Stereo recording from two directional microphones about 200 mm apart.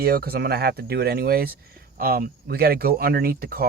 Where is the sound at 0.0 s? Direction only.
50° right (ahead or behind).